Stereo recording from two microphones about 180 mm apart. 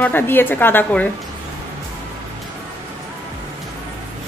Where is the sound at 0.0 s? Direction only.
10° left (ahead or behind).